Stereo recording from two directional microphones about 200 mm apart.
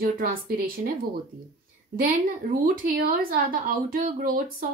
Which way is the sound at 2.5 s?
45° right (ahead or behind).